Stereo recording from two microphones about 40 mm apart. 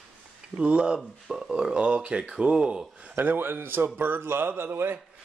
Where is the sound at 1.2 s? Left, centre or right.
Centre.